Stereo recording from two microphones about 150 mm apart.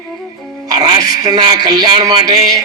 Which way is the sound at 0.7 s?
25° right (ahead or behind).